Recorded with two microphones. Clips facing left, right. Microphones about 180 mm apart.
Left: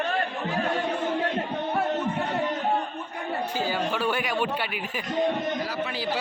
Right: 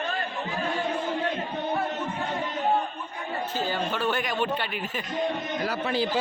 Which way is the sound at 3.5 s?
10° left (ahead or behind).